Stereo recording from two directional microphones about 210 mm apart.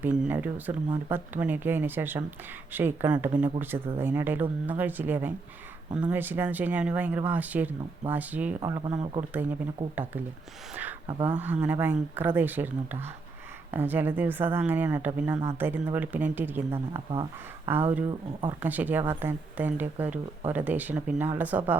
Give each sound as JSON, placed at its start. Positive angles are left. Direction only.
{"t": 0.0, "sound": "speech", "side_deg": -5}
{"t": 8.6, "sound": "speech", "side_deg": -20}
{"t": 8.9, "sound": "speech", "side_deg": -30}
{"t": 9.3, "sound": "speech", "side_deg": -10}
{"t": 11.3, "sound": "speech", "side_deg": -10}